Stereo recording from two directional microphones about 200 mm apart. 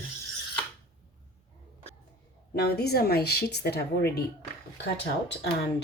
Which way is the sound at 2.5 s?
55° left (ahead or behind).